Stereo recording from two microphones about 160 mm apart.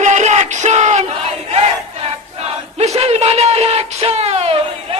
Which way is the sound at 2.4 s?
40° right (ahead or behind).